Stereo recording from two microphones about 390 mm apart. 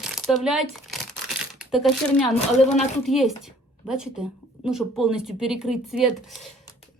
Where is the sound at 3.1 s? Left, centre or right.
Centre.